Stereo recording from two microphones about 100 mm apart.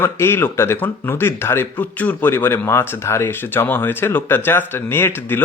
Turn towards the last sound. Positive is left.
turn(degrees=25)  # may be behind; listen again after turning